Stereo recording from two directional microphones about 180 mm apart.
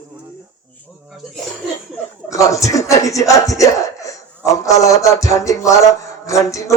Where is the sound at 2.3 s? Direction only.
20° left (ahead or behind).